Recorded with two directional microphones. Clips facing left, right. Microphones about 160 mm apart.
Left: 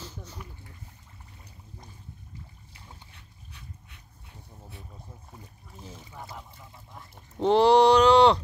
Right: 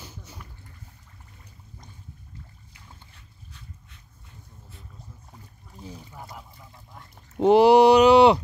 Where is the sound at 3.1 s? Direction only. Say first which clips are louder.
Even; 65° left (ahead or behind).